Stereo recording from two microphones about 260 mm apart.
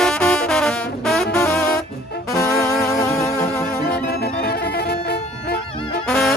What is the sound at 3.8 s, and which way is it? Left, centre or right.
Music, left.